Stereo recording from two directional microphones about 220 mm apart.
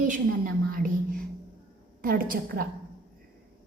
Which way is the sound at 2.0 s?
40° right (ahead or behind).